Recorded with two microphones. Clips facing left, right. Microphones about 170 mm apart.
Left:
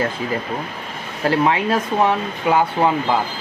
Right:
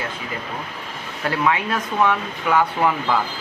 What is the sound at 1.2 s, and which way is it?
Speech, 30° left (ahead or behind).